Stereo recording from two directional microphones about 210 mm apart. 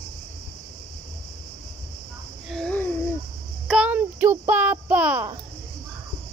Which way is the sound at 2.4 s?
5° left (ahead or behind).